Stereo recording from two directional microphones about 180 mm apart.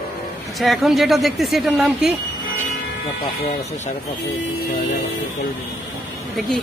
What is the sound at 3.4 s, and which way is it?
Speech, 40° left (ahead or behind).